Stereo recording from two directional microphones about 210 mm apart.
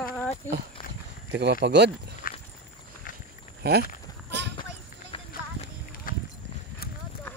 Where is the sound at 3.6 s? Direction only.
50° right (ahead or behind).